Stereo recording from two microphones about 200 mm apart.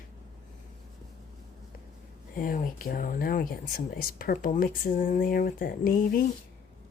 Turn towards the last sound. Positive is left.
turn(degrees=45)  # may be behind; listen again after turning